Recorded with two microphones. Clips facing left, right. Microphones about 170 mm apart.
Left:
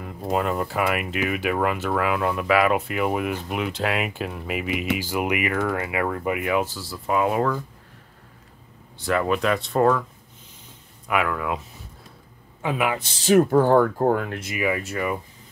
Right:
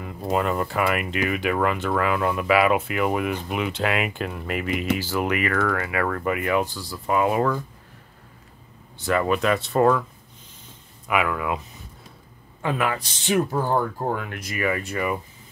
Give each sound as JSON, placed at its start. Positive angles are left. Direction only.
{"t": 0.0, "sound": "speech", "side_deg": 0}
{"t": 6.2, "sound": "speech", "side_deg": 5}
{"t": 8.9, "sound": "speech", "side_deg": 0}
{"t": 11.1, "sound": "speech", "side_deg": -5}
{"t": 12.6, "sound": "speech", "side_deg": 10}
{"t": 13.2, "sound": "speech", "side_deg": 50}
{"t": 14.3, "sound": "speech", "side_deg": 25}
{"t": 14.6, "sound": "speech", "side_deg": 5}